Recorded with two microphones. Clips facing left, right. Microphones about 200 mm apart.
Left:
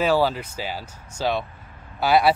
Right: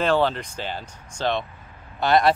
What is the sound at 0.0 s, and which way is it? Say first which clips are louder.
Speech: left 1 dB; 5° left (ahead or behind).